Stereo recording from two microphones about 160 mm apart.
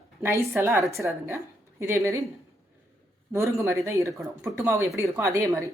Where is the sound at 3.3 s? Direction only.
20° right (ahead or behind).